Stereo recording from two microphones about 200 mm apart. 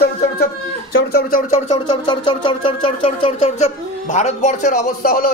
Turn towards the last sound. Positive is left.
turn(degrees=45)  # may be behind; listen again after turning